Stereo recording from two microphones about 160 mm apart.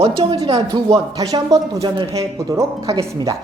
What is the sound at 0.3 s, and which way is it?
Speech, 30° right (ahead or behind).